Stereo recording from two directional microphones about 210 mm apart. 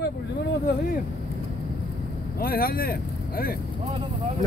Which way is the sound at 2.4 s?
45° left (ahead or behind).